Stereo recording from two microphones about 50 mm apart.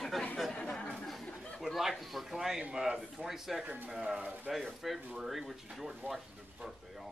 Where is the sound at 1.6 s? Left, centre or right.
Centre.